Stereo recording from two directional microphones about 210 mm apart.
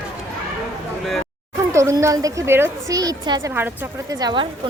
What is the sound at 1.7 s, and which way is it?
A woman's voice, 15° right (ahead or behind).